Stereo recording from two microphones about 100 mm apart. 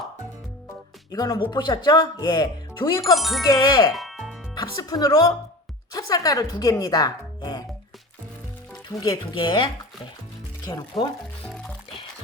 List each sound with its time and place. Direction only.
1.1 s speech: 45° left (ahead or behind)
3.2 s speech: centre (ahead or behind)
3.4 s a woman's voice: 35° left (ahead or behind)
3.9 s music: centre (ahead or behind)
4.5 s a woman's voice: 40° left (ahead or behind)
8.9 s a woman's voice: 35° left (ahead or behind)
9.3 s speech: 50° left (ahead or behind)
11.4 s music: 5° left (ahead or behind)